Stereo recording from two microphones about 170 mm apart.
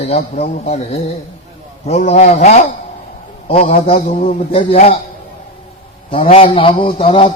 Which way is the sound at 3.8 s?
35° left (ahead or behind).